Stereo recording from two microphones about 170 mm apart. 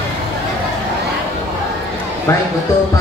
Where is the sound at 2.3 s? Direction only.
15° left (ahead or behind).